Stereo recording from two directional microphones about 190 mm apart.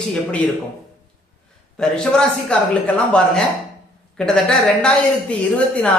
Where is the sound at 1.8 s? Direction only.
5° left (ahead or behind).